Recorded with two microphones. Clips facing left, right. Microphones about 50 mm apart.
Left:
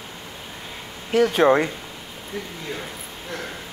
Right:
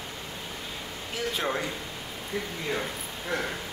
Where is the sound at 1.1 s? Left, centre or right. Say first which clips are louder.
Left 14 dB; left.